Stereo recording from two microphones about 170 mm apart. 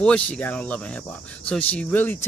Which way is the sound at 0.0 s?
5° left (ahead or behind).